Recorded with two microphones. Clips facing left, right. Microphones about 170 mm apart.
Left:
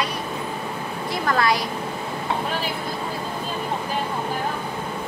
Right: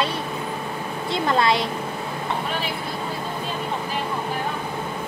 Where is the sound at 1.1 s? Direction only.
25° right (ahead or behind).